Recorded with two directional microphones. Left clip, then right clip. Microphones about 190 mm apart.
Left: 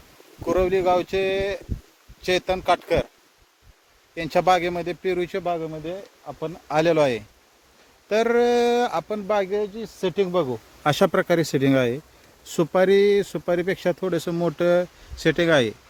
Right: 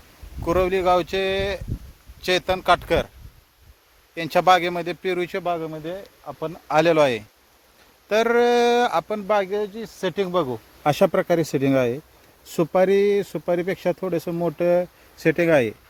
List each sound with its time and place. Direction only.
0.4 s speech: 5° right (ahead or behind)
4.1 s speech: 5° right (ahead or behind)
11.0 s speech: 5° left (ahead or behind)
15.1 s speech: 5° right (ahead or behind)